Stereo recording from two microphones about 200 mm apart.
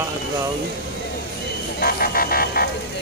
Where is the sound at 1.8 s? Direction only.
45° left (ahead or behind).